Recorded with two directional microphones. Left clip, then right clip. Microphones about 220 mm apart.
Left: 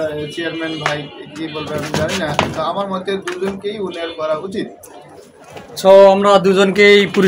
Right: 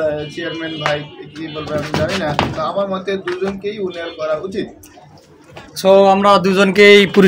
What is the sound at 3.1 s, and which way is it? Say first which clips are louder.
Speech: even; 5° right (ahead or behind).